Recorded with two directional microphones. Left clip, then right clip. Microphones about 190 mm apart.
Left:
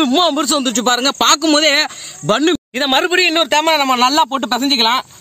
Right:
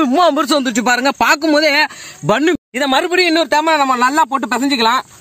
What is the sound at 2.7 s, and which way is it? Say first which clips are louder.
Speech: even; 10° right (ahead or behind).